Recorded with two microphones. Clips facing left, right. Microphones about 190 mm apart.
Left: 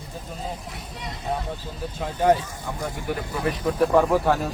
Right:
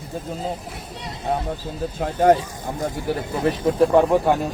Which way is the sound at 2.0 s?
50° right (ahead or behind).